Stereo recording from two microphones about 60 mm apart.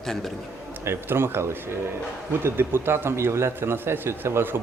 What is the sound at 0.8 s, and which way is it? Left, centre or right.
A man's voice, right.